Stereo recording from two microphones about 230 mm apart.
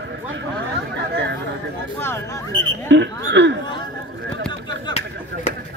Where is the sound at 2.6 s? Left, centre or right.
Right.